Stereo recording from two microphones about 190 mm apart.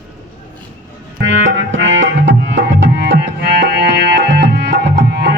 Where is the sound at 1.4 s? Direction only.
80° right.